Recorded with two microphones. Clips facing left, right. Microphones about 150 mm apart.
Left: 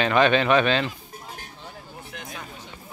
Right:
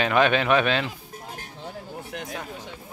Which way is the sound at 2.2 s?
80° right.